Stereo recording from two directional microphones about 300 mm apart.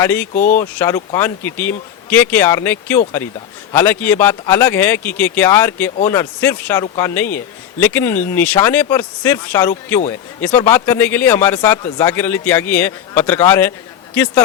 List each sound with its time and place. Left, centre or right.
0.0 s speech: centre
0.3 s speech: left
0.6 s speech: centre